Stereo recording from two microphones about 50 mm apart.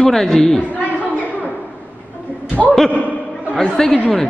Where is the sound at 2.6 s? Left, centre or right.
Centre.